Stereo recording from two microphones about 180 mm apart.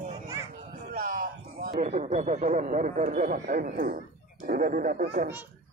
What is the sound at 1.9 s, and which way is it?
Speech, 40° right (ahead or behind).